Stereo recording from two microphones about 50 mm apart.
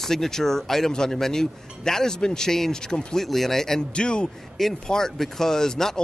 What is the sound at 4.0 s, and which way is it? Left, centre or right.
A man's voice, centre.